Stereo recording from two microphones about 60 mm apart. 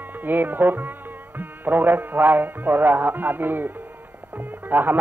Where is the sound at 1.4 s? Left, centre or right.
Right.